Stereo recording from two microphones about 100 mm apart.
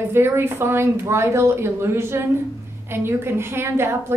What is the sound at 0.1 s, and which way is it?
A woman's voice, 25° right (ahead or behind).